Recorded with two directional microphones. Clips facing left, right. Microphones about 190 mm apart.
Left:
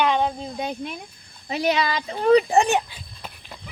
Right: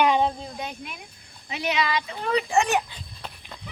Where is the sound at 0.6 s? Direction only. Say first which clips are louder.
Left 6 dB; 30° left (ahead or behind).